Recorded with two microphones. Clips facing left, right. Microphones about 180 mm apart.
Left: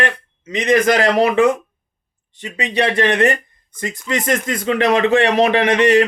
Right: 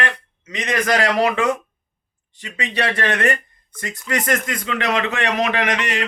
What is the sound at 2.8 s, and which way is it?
A man's voice, 20° left (ahead or behind).